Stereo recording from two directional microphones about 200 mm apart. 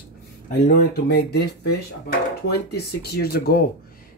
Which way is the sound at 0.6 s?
55° left (ahead or behind).